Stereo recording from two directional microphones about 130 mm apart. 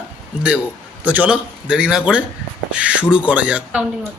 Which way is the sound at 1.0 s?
10° right (ahead or behind).